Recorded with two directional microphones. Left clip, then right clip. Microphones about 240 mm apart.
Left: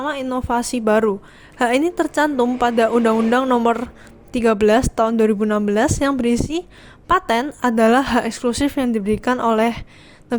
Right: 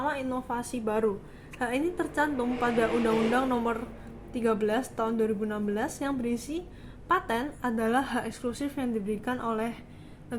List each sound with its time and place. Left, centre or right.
0.0 s a woman's voice: left